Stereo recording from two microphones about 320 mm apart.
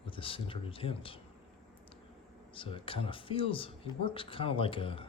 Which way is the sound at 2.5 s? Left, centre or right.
Centre.